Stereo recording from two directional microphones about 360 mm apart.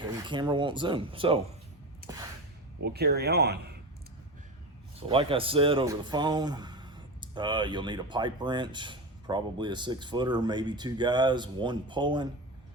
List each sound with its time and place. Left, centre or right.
0.0 s speech: centre
2.8 s speech: right
4.9 s speech: centre